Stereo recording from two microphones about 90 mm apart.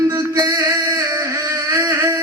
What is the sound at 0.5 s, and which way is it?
Music, 40° right (ahead or behind).